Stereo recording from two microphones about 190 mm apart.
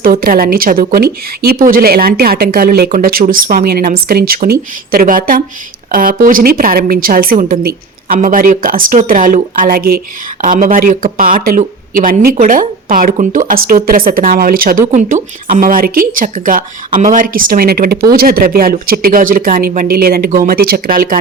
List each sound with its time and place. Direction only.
0.0 s speech: 50° right (ahead or behind)